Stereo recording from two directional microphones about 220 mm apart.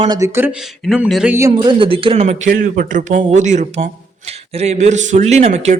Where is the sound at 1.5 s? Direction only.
20° right (ahead or behind).